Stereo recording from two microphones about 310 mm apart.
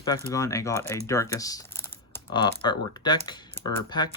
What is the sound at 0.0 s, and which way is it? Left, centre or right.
Speech, centre.